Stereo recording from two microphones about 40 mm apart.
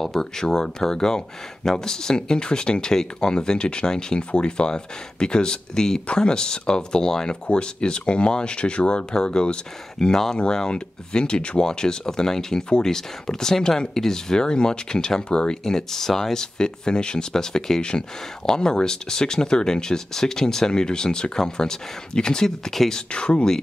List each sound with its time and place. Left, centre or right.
0.0 s speech: centre
15.6 s speech: centre
23.1 s speech: left